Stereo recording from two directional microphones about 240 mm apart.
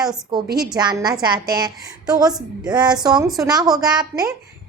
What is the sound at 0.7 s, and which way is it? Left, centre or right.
Speech, centre.